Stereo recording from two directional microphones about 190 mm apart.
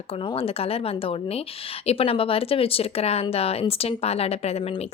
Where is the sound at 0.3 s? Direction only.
30° left (ahead or behind).